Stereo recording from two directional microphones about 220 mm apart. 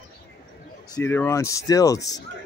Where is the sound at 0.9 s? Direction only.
10° left (ahead or behind).